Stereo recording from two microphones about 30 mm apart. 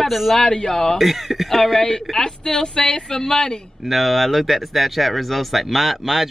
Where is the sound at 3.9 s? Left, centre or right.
Centre.